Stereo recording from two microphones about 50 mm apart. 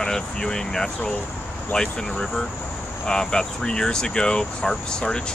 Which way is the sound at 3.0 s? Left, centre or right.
Centre.